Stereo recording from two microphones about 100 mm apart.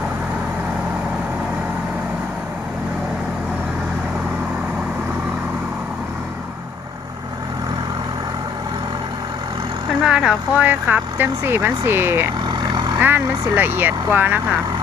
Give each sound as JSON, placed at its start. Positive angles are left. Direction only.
{"t": 10.1, "sound": "speech", "side_deg": -10}
{"t": 12.5, "sound": "vehicle", "side_deg": -45}
{"t": 13.0, "sound": "speech", "side_deg": -20}